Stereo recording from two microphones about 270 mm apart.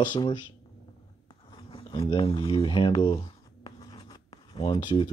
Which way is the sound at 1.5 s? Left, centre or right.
Centre.